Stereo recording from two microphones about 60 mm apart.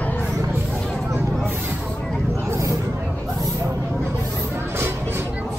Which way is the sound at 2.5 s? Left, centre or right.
Right.